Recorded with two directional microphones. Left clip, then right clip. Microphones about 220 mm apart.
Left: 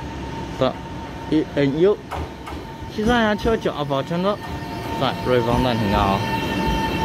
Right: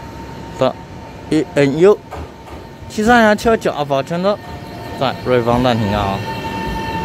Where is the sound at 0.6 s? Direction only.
20° right (ahead or behind).